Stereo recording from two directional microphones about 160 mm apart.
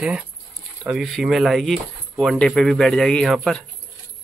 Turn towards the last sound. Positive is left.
turn(degrees=0)  # may be behind; listen again after turning